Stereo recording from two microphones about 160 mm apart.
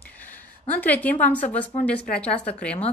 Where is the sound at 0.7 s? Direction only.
10° left (ahead or behind).